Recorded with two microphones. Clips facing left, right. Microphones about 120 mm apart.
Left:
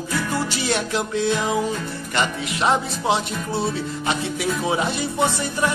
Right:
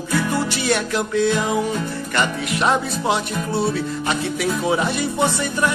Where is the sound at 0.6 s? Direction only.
20° left (ahead or behind).